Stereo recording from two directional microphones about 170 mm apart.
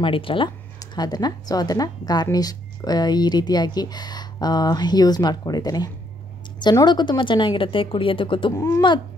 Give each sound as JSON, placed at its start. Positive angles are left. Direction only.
{"t": 0.0, "sound": "speech", "side_deg": 30}
{"t": 8.5, "sound": "speech", "side_deg": 15}